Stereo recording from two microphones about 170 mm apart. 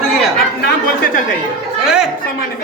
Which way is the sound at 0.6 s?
55° left (ahead or behind).